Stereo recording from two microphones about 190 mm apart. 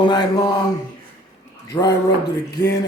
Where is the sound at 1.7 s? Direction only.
20° left (ahead or behind).